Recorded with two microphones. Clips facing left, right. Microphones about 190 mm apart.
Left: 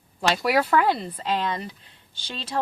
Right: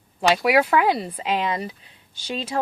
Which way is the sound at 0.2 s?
5° right (ahead or behind).